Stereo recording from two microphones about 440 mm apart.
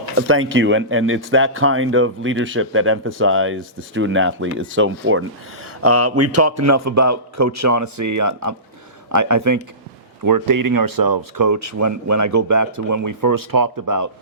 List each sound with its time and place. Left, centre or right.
0.2 s speech: right